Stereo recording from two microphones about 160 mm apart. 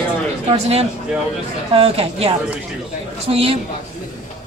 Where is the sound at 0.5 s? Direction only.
40° right (ahead or behind).